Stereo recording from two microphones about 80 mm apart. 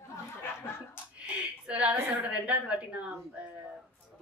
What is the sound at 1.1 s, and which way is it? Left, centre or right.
A woman's voice, centre.